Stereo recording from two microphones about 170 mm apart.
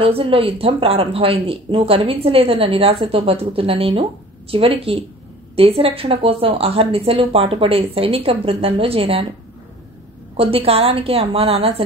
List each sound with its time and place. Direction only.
0.0 s speech: 35° right (ahead or behind)
10.3 s speech: 35° right (ahead or behind)